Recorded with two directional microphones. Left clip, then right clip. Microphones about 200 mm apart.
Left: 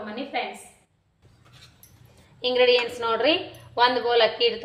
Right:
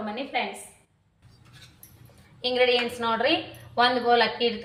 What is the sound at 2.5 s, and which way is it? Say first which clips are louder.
A woman's voice: left 3 dB; 50° left (ahead or behind).